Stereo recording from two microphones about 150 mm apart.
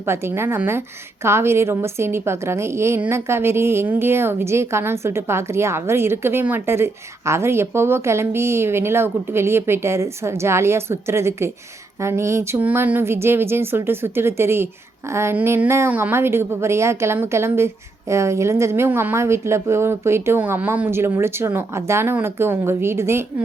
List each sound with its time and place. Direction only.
0.0 s a woman's voice: 15° right (ahead or behind)